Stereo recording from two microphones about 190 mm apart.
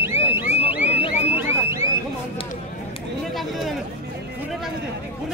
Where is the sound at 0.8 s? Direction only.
35° left (ahead or behind).